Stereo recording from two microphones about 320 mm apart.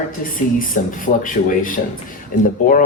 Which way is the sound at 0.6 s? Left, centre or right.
Left.